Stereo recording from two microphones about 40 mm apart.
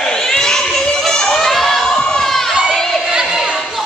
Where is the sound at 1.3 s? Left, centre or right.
Centre.